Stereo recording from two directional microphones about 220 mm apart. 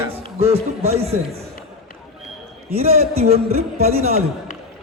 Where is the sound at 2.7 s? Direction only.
30° right (ahead or behind).